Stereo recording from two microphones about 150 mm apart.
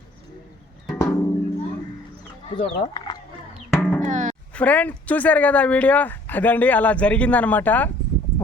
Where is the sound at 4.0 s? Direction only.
55° right (ahead or behind).